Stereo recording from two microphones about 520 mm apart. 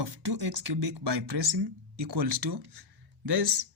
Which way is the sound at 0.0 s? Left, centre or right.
Right.